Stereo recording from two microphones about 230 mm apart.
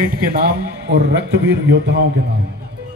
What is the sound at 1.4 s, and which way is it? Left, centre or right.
Speech, right.